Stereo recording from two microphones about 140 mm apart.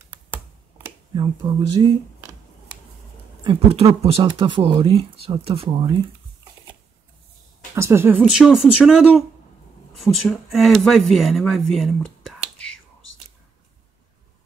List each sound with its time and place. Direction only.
1.1 s speech: 30° right (ahead or behind)
3.4 s speech: 40° right (ahead or behind)
7.7 s speech: 20° right (ahead or behind); by 12.1 s centre (ahead or behind)